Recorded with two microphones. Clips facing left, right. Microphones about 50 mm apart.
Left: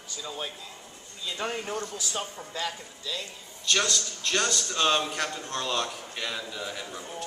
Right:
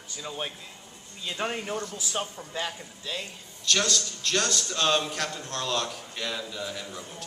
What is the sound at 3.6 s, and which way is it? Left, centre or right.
A man's voice, centre.